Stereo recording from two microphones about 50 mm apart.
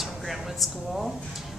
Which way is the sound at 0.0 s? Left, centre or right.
Centre.